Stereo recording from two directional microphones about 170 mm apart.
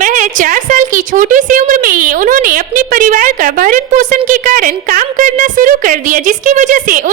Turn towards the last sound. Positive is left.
turn(degrees=-50)  # may be behind; listen again after turning